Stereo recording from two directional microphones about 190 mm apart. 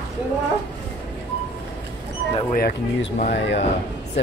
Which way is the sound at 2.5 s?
55° left (ahead or behind).